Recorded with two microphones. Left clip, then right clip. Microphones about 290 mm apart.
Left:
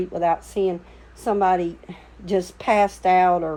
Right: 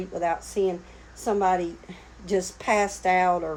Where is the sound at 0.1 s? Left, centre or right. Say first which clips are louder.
Left 3 dB; left.